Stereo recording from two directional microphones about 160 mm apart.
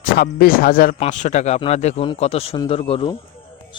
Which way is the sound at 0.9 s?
45° left (ahead or behind).